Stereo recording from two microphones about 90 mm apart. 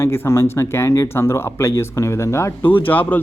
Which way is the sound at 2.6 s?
20° left (ahead or behind).